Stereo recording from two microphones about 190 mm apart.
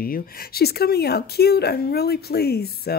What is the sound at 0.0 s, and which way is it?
Speech, 50° left (ahead or behind).